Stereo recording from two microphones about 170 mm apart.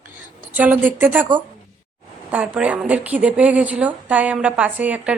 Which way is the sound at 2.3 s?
10° right (ahead or behind).